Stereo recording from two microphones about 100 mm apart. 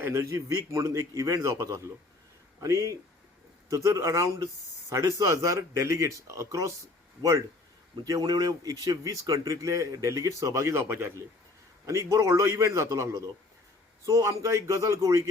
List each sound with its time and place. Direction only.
0.0 s speech: 30° right (ahead or behind)